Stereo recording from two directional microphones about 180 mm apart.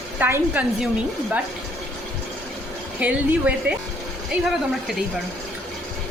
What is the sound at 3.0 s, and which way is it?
Speech, 5° right (ahead or behind).